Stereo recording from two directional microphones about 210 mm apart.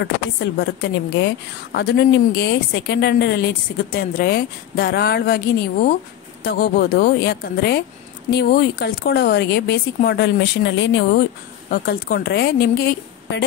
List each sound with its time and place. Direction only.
0.0 s a woman's voice: 55° left (ahead or behind)
6.4 s speech: 50° left (ahead or behind)